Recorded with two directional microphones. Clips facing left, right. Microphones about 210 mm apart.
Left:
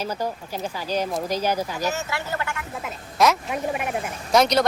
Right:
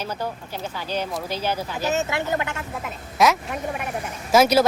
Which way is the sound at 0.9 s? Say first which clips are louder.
Left 3 dB; 35° left (ahead or behind).